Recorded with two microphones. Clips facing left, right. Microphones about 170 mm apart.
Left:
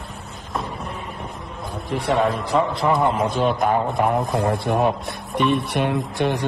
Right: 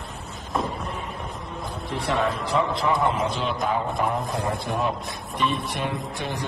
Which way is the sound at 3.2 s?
55° left (ahead or behind).